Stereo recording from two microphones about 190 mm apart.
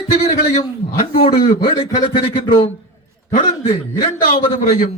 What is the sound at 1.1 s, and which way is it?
A man's voice, 30° left (ahead or behind).